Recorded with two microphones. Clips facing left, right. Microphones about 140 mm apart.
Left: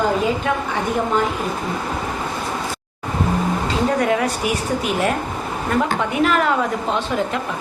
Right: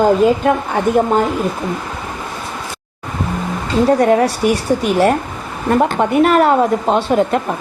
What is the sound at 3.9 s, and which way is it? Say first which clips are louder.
Speech: right 7 dB; 40° right (ahead or behind).